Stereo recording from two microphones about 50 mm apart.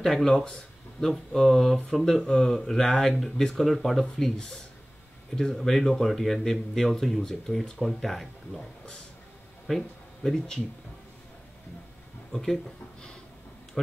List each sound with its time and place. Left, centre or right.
0.0 s speech: centre
9.7 s speech: centre
12.3 s speech: centre